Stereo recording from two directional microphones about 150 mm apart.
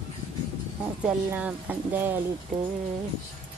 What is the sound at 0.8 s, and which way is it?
Speech, 10° right (ahead or behind).